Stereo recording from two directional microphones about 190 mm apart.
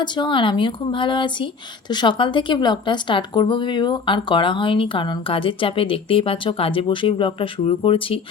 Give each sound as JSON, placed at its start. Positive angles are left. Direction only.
{"t": 0.0, "sound": "a woman's voice", "side_deg": 25}